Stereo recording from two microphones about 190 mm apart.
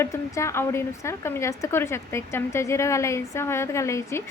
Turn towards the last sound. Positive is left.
turn(degrees=15)  # may be behind; listen again after turning